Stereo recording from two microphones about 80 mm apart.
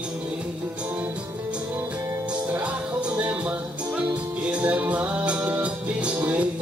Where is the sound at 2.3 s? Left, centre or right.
Centre.